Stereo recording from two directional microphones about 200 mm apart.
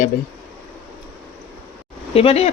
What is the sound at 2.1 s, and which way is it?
Speech, 30° left (ahead or behind).